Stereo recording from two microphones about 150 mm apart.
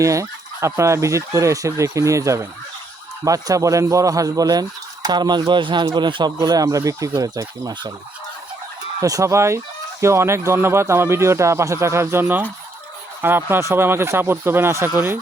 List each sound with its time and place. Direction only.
0.0 s speech: 20° right (ahead or behind)
9.0 s speech: 25° right (ahead or behind)